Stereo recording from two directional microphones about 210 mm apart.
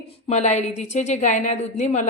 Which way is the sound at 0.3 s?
35° left (ahead or behind).